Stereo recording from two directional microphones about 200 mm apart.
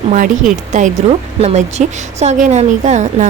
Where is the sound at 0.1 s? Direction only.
40° right (ahead or behind).